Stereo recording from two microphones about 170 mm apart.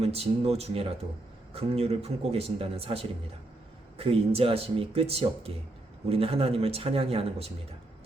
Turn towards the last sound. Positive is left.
turn(degrees=-35)  # may be behind; listen again after turning